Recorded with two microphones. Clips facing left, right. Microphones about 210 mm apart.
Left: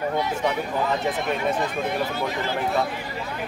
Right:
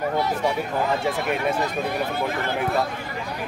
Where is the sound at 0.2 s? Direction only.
20° left (ahead or behind).